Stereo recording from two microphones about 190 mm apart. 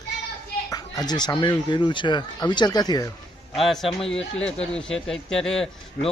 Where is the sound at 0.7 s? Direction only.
20° left (ahead or behind).